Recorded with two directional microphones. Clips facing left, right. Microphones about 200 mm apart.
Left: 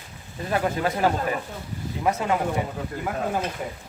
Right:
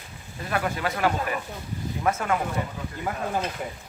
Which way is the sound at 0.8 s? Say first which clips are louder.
Left 2 dB; 25° left (ahead or behind).